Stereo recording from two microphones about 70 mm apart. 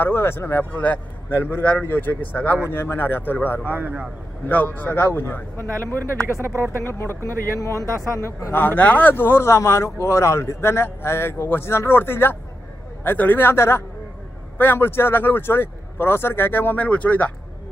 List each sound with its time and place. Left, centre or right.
0.0 s speech: left
1.4 s a man's voice: left
2.6 s speech: left
3.6 s a man's voice: right
4.4 s speech: left
6.2 s speech: right
6.8 s speech: left
8.5 s speech: left